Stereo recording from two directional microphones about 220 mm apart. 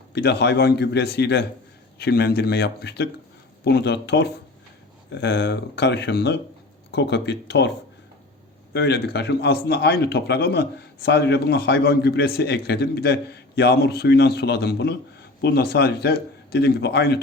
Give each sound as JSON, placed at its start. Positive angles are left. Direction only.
{"t": 0.1, "sound": "a man's voice", "side_deg": 50}
{"t": 8.7, "sound": "a man's voice", "side_deg": 50}